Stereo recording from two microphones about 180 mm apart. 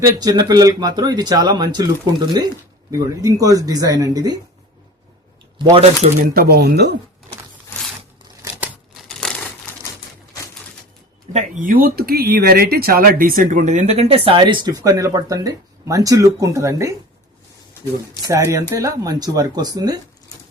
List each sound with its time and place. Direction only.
0.1 s speech: 20° right (ahead or behind)
5.5 s speech: 30° right (ahead or behind)
6.0 s speech: 55° right (ahead or behind)
8.4 s a sound: 15° right (ahead or behind)
9.0 s crumpling: centre (ahead or behind)
11.3 s speech: 45° right (ahead or behind); by 16.9 s 15° right (ahead or behind)
18.3 s a woman's voice: 15° right (ahead or behind)